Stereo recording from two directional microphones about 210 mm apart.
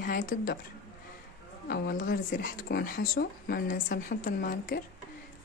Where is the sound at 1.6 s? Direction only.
50° left (ahead or behind).